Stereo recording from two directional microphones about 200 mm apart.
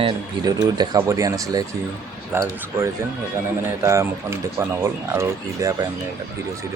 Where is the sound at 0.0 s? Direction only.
20° right (ahead or behind).